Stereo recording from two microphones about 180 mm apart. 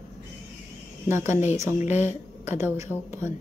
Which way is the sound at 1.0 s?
15° right (ahead or behind).